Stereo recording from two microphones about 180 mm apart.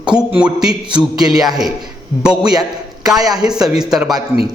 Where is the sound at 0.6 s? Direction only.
20° right (ahead or behind).